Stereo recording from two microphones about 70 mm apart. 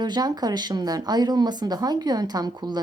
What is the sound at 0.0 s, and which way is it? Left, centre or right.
Speech, right.